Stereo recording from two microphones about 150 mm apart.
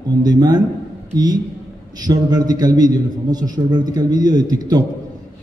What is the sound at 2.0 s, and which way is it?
A man's voice, 25° right (ahead or behind).